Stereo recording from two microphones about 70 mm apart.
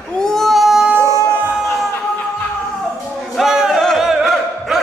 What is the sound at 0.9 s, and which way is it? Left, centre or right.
Music, right.